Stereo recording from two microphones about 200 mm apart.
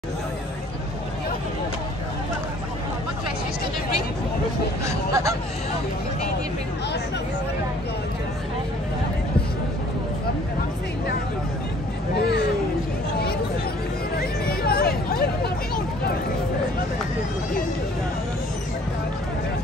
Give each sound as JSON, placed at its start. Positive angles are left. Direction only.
{"t": 4.8, "sound": "speech", "side_deg": -15}
{"t": 14.6, "sound": "hubbub", "side_deg": 50}